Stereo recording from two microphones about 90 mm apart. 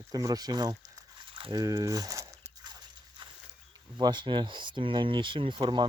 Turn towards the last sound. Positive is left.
turn(degrees=-60)  # may be behind; listen again after turning